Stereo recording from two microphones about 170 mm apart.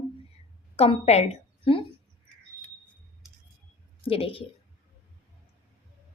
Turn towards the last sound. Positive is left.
turn(degrees=35)  # may be behind; listen again after turning